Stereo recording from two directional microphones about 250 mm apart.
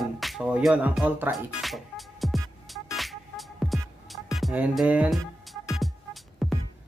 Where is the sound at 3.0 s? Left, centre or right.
Centre.